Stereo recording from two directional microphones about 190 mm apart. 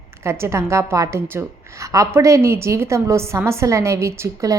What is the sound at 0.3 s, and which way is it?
A woman's voice, 15° right (ahead or behind).